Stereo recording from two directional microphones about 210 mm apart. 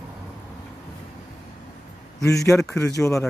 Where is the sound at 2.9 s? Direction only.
15° left (ahead or behind).